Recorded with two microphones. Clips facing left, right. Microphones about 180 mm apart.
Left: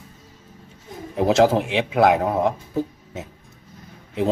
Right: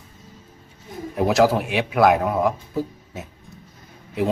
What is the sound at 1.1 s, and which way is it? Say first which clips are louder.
A man's voice: left 1 dB; 25° left (ahead or behind).